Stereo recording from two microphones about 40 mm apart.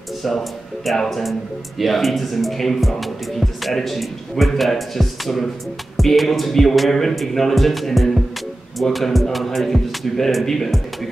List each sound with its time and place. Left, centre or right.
0.2 s speech: centre